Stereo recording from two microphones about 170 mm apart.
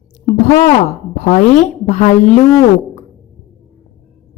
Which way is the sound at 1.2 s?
45° left (ahead or behind).